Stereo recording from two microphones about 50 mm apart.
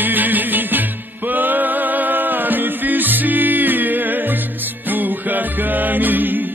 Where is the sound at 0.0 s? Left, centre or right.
Right.